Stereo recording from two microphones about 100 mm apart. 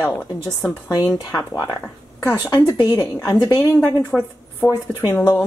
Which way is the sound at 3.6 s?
25° left (ahead or behind).